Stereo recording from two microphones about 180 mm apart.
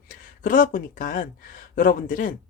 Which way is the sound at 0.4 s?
50° left (ahead or behind).